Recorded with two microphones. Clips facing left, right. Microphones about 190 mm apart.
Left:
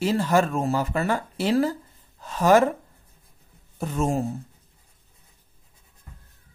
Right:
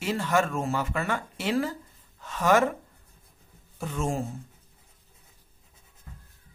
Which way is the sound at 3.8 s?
40° left (ahead or behind).